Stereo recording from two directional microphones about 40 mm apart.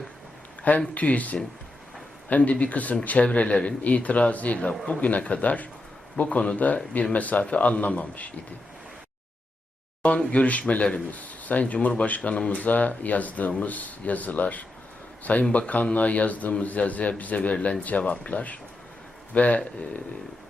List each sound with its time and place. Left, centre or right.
0.9 s speech: left
6.2 s speech: left
6.6 s speech: left
10.0 s a man's voice: left